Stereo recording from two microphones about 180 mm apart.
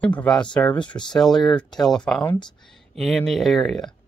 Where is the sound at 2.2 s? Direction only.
25° left (ahead or behind).